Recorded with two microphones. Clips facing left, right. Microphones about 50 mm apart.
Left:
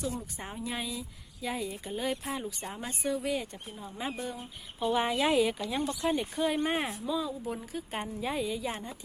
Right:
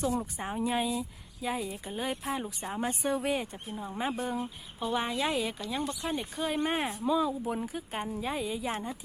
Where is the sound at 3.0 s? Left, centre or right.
Right.